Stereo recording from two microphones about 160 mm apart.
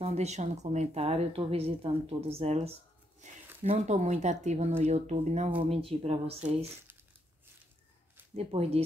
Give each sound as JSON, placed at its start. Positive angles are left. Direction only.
{"t": 0.0, "sound": "speech", "side_deg": -40}
{"t": 8.4, "sound": "speech", "side_deg": -35}